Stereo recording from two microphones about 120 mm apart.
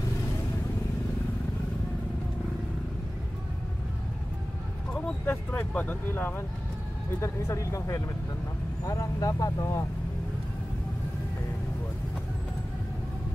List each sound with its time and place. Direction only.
4.9 s speech: 10° left (ahead or behind); by 9.8 s 30° left (ahead or behind)